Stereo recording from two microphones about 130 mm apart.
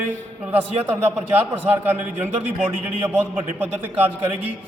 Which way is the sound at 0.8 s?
15° right (ahead or behind).